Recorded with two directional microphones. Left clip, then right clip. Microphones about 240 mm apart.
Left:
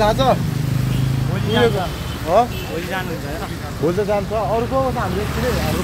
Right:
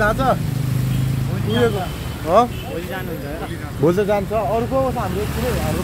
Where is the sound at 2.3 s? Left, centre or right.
Right.